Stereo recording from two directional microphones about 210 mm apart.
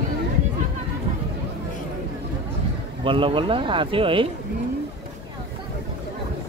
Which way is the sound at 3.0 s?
25° right (ahead or behind).